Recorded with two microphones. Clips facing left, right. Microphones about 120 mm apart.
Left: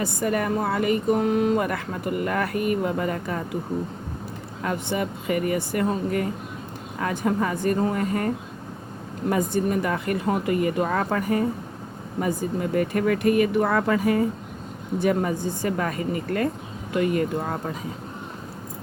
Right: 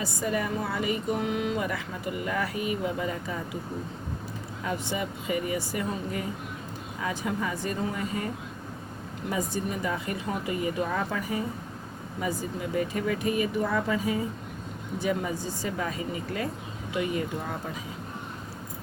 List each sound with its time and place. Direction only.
0.0 s speech: 60° left (ahead or behind)
4.6 s speech: 55° left (ahead or behind)
9.3 s speech: 55° left (ahead or behind)